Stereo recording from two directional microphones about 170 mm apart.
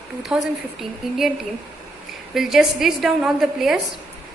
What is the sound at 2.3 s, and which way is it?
A woman's voice, centre (ahead or behind).